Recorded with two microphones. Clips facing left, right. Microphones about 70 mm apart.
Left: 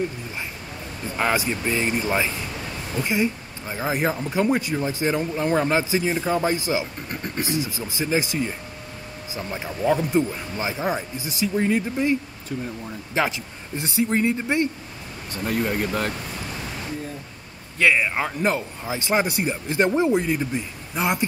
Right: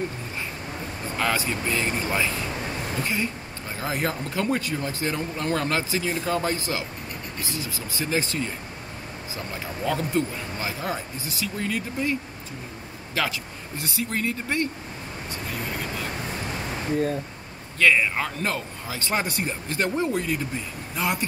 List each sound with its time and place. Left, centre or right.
1.1 s speech: centre
15.3 s speech: left
17.7 s speech: centre